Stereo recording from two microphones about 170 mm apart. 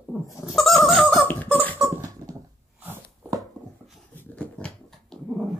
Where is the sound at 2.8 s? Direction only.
10° right (ahead or behind).